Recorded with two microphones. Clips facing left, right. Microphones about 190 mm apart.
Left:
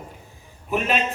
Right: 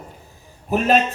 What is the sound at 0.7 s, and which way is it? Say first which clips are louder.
Speech: right 4 dB; 40° right (ahead or behind).